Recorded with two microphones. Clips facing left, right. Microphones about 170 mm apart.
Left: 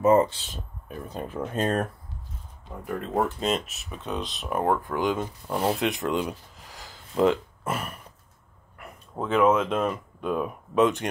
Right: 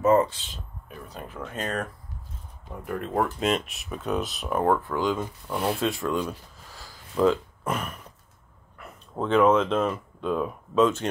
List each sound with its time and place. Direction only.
0.0 s speech: 20° left (ahead or behind)
1.1 s speech: 30° left (ahead or behind)
3.4 s speech: centre (ahead or behind)
4.5 s speech: 10° left (ahead or behind)
7.6 s speech: 5° left (ahead or behind)
9.1 s speech: 5° left (ahead or behind)